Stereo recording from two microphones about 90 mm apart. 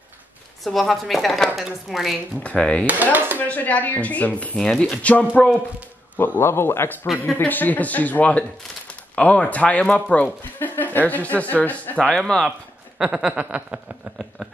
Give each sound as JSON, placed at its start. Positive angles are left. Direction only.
{"t": 0.7, "sound": "speech", "side_deg": 0}
{"t": 2.4, "sound": "speech", "side_deg": 15}
{"t": 2.9, "sound": "chopping", "side_deg": -20}
{"t": 3.3, "sound": "speech", "side_deg": 20}
{"t": 4.6, "sound": "speech", "side_deg": 5}
{"t": 12.2, "sound": "speech", "side_deg": 0}
{"t": 13.0, "sound": "a sound", "side_deg": -10}